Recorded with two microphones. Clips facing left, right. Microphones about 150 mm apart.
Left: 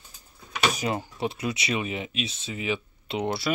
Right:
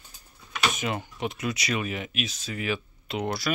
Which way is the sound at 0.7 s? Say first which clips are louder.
Left 2 dB; 35° left (ahead or behind).